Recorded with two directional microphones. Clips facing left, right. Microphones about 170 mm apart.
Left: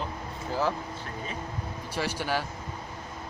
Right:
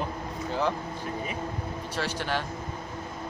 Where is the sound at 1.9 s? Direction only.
10° left (ahead or behind).